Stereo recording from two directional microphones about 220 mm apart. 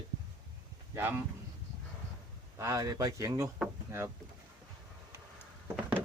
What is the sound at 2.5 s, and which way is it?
Speech, 15° right (ahead or behind).